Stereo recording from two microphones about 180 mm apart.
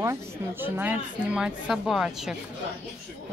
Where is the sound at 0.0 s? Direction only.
15° right (ahead or behind).